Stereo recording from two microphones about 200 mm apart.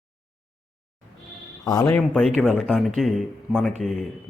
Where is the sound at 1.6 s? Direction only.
20° left (ahead or behind).